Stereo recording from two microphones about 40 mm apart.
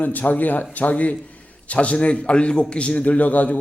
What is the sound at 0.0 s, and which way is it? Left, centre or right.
A man's voice, left.